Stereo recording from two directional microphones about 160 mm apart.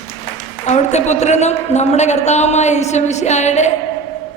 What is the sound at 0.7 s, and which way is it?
A woman's voice, 45° left (ahead or behind).